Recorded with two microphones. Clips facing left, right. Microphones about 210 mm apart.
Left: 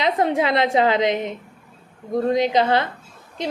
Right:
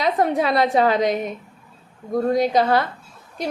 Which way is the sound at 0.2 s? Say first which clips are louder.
Right 1 dB; 25° left (ahead or behind).